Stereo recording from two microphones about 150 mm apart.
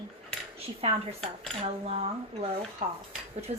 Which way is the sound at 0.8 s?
40° right (ahead or behind).